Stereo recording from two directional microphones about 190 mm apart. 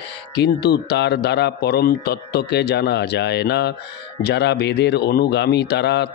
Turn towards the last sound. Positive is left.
turn(degrees=65)  # may be behind; listen again after turning